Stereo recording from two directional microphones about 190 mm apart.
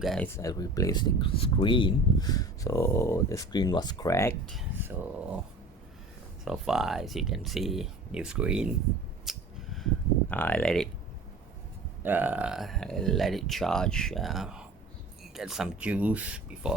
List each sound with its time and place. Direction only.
0.0 s speech: centre (ahead or behind)
0.3 s speech: 20° left (ahead or behind)
4.8 s speech: 10° right (ahead or behind)
6.4 s speech: centre (ahead or behind)
9.2 s a sound: centre (ahead or behind)
12.0 s speech: 10° right (ahead or behind)